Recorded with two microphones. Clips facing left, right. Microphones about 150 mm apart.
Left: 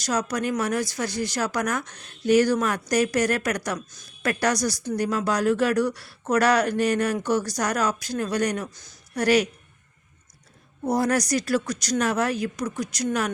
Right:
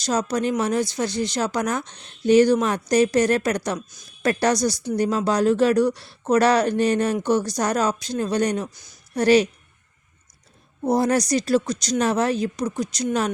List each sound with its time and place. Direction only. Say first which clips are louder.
0.0 s speech: right 3 dB; 25° right (ahead or behind)
8.7 s speech: left 1 dB; 10° right (ahead or behind)
9.1 s speech: right 4 dB; 25° right (ahead or behind)
10.8 s speech: right 3 dB; 25° right (ahead or behind)